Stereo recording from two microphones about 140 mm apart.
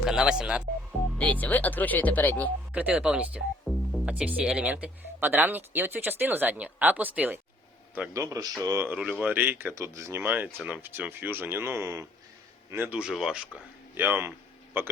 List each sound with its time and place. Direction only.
0.0 s speech: 5° right (ahead or behind)
1.2 s speech: 10° left (ahead or behind)
2.7 s speech: 10° right (ahead or behind)
8.1 s speech: 25° right (ahead or behind); by 13.5 s 5° right (ahead or behind)
13.9 s a sound: 15° right (ahead or behind)